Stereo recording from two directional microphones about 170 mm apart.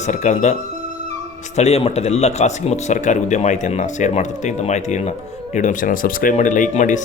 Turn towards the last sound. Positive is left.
turn(degrees=45)  # may be behind; listen again after turning